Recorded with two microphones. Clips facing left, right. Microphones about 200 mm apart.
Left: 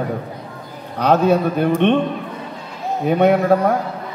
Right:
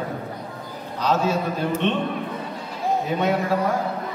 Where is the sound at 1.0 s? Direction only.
60° left (ahead or behind).